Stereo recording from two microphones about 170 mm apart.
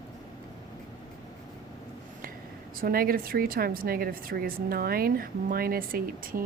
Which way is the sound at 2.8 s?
60° right (ahead or behind).